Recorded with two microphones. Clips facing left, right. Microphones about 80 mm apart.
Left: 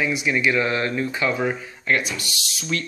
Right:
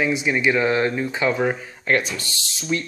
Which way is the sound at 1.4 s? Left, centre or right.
Right.